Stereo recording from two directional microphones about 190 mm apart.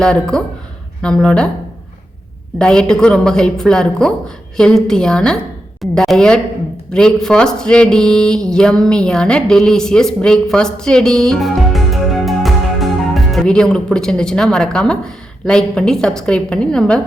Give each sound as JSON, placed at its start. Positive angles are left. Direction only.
{"t": 0.0, "sound": "a woman's voice", "side_deg": 5}
{"t": 2.6, "sound": "a woman's voice", "side_deg": 5}